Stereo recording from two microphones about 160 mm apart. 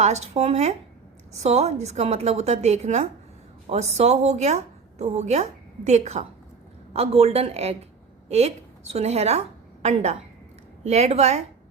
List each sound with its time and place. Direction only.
0.0 s a woman's voice: 45° right (ahead or behind)